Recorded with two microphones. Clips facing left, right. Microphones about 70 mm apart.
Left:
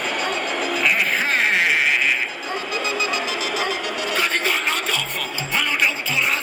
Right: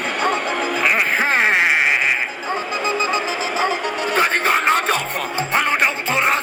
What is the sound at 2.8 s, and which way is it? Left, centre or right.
Music, right.